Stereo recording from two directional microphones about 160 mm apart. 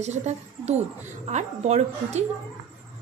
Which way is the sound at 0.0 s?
45° right (ahead or behind).